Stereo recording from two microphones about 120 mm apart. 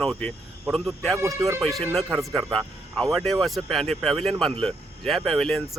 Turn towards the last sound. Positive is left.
turn(degrees=5)  # may be behind; listen again after turning